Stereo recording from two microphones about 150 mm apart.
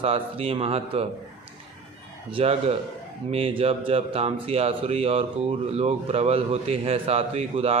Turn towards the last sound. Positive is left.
turn(degrees=-40)  # may be behind; listen again after turning